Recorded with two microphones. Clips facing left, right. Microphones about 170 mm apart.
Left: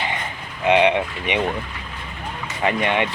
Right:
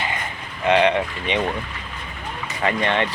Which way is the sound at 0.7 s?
15° left (ahead or behind).